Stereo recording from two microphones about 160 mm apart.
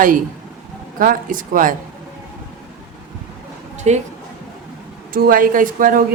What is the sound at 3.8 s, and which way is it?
Speech, 45° right (ahead or behind).